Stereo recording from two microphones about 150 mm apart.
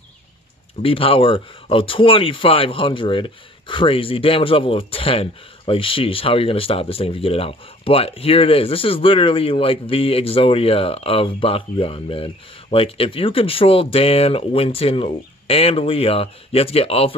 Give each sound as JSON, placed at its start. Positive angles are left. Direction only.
{"t": 0.8, "sound": "speech", "side_deg": 35}